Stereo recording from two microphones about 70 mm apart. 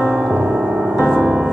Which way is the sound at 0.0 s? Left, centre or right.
Centre.